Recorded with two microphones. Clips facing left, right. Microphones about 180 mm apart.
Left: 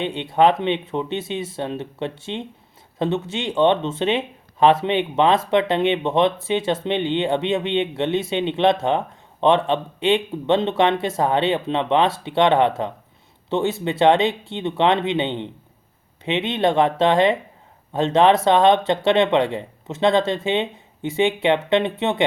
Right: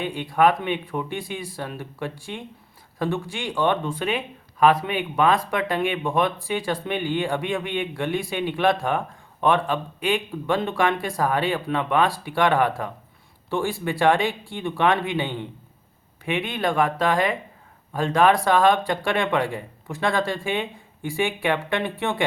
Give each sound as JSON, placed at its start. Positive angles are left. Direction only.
{"t": 0.0, "sound": "speech", "side_deg": 25}